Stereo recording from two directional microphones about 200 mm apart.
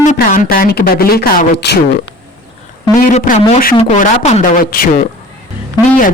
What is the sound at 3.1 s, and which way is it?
Speech, 35° left (ahead or behind).